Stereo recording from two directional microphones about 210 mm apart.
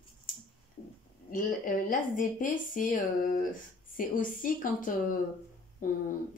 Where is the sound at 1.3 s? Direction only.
40° left (ahead or behind).